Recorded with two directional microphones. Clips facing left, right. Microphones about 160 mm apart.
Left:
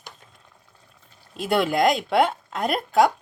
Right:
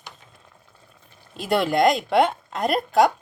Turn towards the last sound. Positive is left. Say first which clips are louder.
# right 1 dB
turn(degrees=0)  # may be behind; listen again after turning